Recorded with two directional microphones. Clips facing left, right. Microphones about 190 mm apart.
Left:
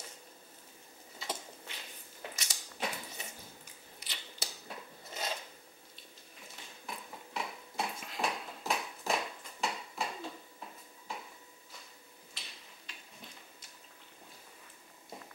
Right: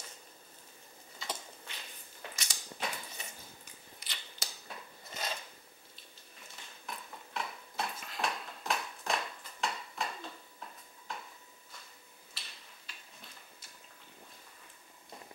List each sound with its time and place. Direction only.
1.2 s a sound: 10° left (ahead or behind)
4.0 s scissors: 5° left (ahead or behind)
6.9 s dishes: 5° left (ahead or behind)